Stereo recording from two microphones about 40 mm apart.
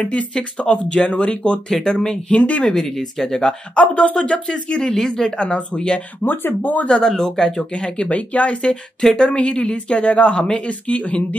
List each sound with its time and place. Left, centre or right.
0.0 s speech: left
1.7 s speech: centre
2.3 s speech: left
2.6 s speech: centre
3.7 s speech: left
4.9 s speech: centre
6.2 s speech: left
6.9 s speech: centre
8.0 s speech: left
8.6 s speech: centre